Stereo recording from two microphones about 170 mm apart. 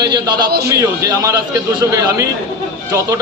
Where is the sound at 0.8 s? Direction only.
20° right (ahead or behind).